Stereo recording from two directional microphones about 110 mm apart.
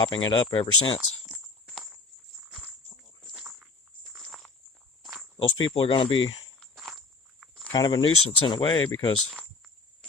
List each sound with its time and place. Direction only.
0.0 s speech: 45° left (ahead or behind)
3.3 s a sound: 15° right (ahead or behind)
4.2 s walk: centre (ahead or behind)
5.4 s speech: 55° left (ahead or behind)
6.6 s walk: centre (ahead or behind)
7.7 s speech: 40° left (ahead or behind)